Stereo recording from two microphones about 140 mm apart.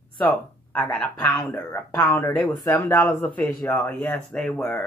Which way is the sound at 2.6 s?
20° left (ahead or behind).